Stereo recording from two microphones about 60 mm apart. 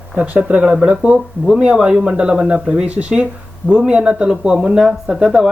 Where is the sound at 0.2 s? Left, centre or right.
Right.